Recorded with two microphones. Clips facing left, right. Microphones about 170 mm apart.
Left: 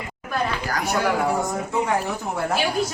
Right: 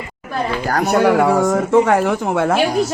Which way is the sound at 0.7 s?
60° right (ahead or behind).